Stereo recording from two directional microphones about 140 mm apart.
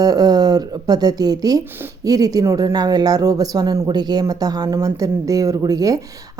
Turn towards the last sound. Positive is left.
turn(degrees=-25)  # may be behind; listen again after turning